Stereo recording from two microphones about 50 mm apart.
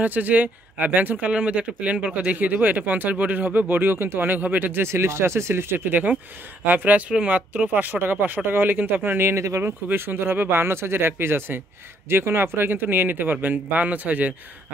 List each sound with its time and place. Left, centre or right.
0.0 s speech: right
1.3 s speech: right
4.8 s speech: right
7.1 s speech: right
9.3 s speech: right
9.6 s speech: right